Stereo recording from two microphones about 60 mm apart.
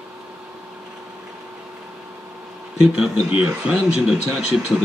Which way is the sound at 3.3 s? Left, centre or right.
Centre.